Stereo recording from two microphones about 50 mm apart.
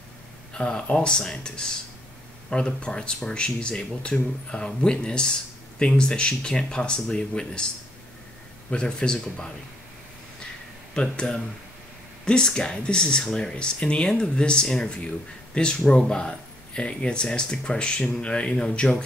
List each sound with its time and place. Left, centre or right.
0.6 s speech: centre
8.6 s speech: centre
11.0 s speech: centre